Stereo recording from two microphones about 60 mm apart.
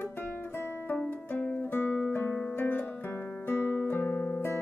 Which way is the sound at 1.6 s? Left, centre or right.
Left.